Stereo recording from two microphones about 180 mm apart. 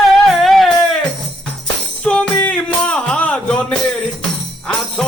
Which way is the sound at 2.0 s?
5° left (ahead or behind).